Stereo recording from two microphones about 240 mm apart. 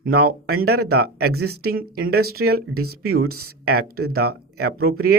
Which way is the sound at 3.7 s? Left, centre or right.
Right.